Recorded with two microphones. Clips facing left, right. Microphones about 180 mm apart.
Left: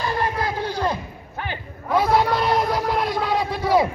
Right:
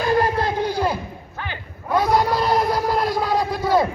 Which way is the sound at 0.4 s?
15° right (ahead or behind).